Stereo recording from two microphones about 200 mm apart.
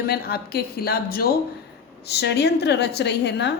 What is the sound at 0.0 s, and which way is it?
A woman's voice, 50° left (ahead or behind).